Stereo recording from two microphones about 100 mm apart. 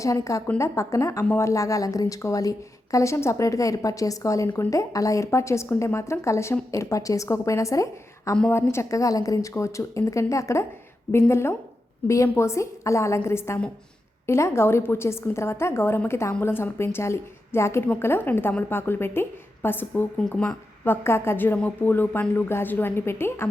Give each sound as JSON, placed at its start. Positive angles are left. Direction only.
{"t": 0.0, "sound": "a woman's voice", "side_deg": 30}